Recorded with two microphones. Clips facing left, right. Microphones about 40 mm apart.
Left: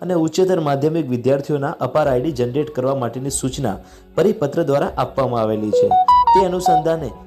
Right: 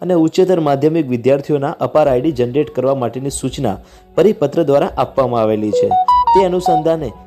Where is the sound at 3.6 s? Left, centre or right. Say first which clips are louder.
Right 4 dB; right.